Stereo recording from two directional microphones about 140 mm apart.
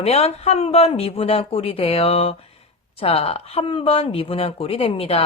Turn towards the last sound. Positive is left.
turn(degrees=45)  # may be behind; listen again after turning